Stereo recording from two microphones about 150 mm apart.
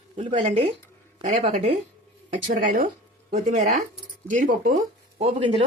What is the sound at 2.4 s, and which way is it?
Speech, 60° right (ahead or behind).